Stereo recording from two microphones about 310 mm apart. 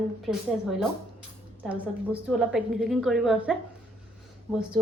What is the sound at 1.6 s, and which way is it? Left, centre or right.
A woman's voice, centre.